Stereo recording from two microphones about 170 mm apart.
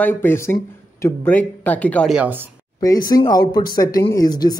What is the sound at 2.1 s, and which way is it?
Speech, 10° right (ahead or behind).